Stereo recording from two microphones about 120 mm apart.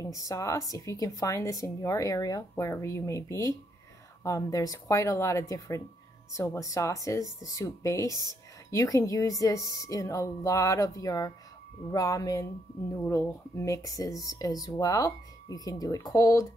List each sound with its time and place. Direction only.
0.3 s speech: 25° left (ahead or behind)